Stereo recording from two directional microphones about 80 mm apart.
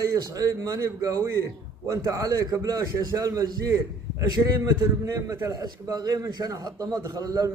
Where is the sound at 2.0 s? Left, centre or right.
Right.